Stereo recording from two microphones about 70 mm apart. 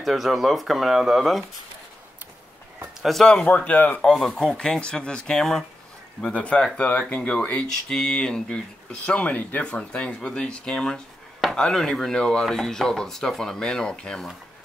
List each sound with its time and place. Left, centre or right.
0.0 s speech: centre
3.0 s speech: centre
3.3 s speech: centre
4.0 s speech: centre
6.3 s speech: centre